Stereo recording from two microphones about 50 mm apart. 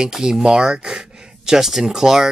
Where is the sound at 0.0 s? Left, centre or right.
Centre.